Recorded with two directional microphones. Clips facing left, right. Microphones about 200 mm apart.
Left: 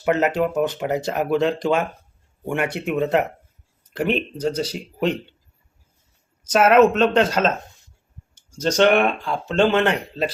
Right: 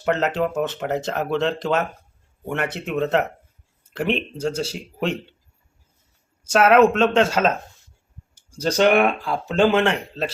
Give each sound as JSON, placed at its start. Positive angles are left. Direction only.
{"t": 0.0, "sound": "speech", "side_deg": 5}
{"t": 6.5, "sound": "speech", "side_deg": 5}
{"t": 7.3, "sound": "speech", "side_deg": -5}
{"t": 8.4, "sound": "a sound", "side_deg": -35}
{"t": 8.6, "sound": "speech", "side_deg": -5}